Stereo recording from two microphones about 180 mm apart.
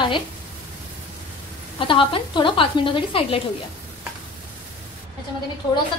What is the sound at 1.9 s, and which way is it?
A woman's voice, 30° left (ahead or behind).